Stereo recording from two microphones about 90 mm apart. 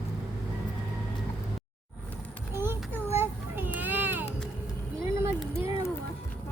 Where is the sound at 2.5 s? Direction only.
25° right (ahead or behind).